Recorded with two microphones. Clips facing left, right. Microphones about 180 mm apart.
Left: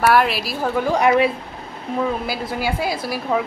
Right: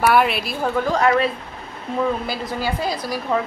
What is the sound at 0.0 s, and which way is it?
A woman's voice, centre (ahead or behind).